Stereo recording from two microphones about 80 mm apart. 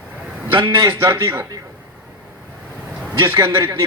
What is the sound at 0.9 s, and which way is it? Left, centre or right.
Speech, right.